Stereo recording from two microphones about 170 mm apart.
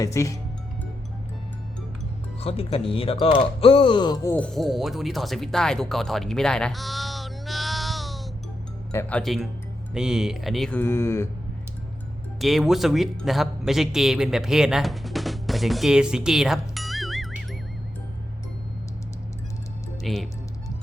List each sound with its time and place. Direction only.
0.0 s speech: 20° left (ahead or behind)
2.4 s speech: 35° left (ahead or behind); by 4.4 s 20° left (ahead or behind)
4.4 s speech: 5° left (ahead or behind)
8.9 s speech: 10° left (ahead or behind)
12.4 s a man's voice: centre (ahead or behind)
20.0 s speech: centre (ahead or behind)